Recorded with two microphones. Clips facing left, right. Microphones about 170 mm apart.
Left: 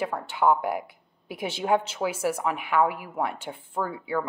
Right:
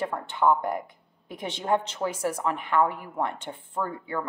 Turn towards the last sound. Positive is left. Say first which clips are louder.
# left 2 dB
turn(degrees=10)  # may be behind; listen again after turning